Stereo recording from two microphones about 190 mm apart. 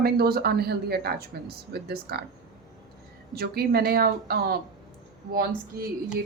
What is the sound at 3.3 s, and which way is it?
Speech, 55° right (ahead or behind).